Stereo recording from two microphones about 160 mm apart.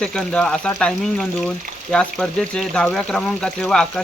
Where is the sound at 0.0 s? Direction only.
5° left (ahead or behind).